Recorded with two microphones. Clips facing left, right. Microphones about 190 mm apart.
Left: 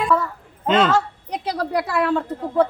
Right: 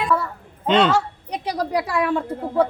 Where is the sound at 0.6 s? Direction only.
5° left (ahead or behind).